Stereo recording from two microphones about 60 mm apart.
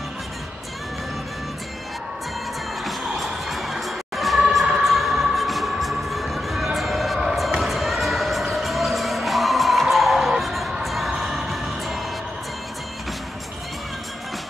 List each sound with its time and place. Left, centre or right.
2.8 s music: centre